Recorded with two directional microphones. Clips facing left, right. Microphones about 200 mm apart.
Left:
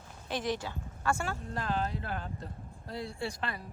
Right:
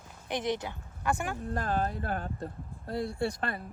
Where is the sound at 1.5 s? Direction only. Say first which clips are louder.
Right 3 dB; 50° right (ahead or behind).